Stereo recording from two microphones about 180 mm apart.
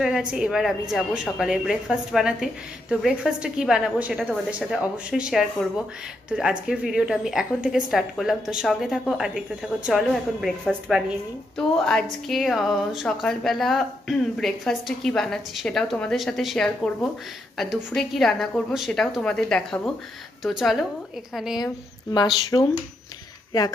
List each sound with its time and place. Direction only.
0.3 s a woman's voice: 5° right (ahead or behind)
22.1 s speech: 25° left (ahead or behind)